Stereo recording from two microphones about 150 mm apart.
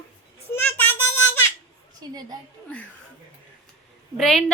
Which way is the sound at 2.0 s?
25° right (ahead or behind).